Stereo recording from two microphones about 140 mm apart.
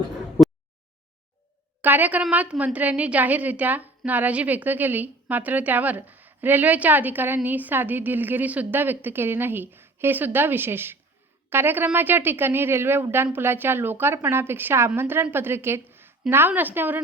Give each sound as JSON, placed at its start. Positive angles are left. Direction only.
{"t": 1.8, "sound": "a woman's voice", "side_deg": -10}